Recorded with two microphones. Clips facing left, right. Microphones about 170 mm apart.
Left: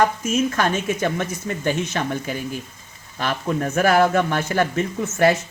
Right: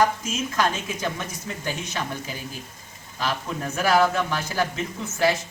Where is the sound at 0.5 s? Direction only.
55° left (ahead or behind).